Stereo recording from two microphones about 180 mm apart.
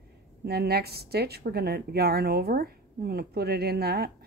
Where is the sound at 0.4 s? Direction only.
65° right (ahead or behind).